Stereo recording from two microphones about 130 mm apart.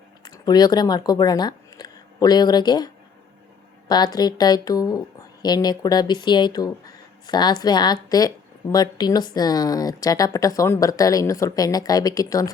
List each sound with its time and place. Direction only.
0.2 s a woman's voice: 30° left (ahead or behind)